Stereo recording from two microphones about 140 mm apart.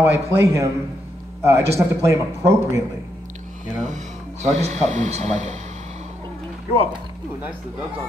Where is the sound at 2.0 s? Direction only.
20° right (ahead or behind).